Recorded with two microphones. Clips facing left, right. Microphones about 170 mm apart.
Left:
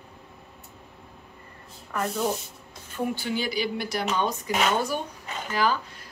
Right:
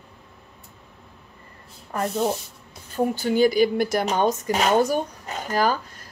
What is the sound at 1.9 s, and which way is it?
Speech, 30° right (ahead or behind).